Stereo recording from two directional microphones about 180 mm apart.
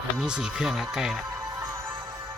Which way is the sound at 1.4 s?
20° right (ahead or behind).